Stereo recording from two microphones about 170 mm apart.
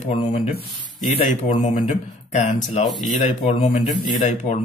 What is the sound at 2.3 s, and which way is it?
A man's voice, 45° left (ahead or behind).